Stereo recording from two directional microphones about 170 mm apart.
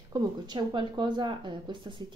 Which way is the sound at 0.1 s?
25° right (ahead or behind).